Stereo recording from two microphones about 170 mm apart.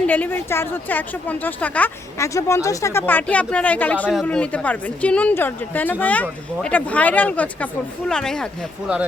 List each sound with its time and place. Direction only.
0.1 s speech: 10° left (ahead or behind)